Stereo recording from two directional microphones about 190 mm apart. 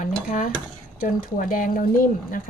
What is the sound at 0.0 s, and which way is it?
Speech, 45° left (ahead or behind).